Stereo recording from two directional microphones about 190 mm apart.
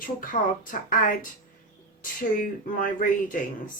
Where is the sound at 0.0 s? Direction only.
45° left (ahead or behind).